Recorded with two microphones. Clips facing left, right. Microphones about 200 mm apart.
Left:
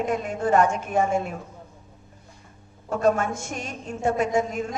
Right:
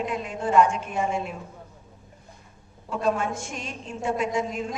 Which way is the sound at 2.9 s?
45° left (ahead or behind).